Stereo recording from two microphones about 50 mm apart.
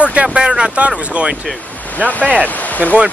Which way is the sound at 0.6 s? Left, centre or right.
Right.